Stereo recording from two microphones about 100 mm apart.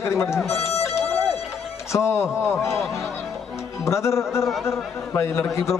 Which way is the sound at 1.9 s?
25° left (ahead or behind).